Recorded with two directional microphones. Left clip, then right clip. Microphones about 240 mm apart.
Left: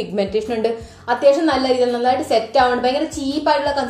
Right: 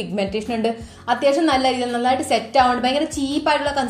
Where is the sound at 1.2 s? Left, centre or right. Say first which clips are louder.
Left 3 dB; right.